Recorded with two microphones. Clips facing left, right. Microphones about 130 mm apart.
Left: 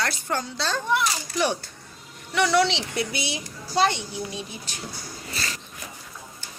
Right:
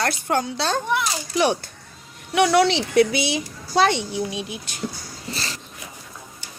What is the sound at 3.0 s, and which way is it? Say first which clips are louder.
Speech: right 10 dB; 90° right.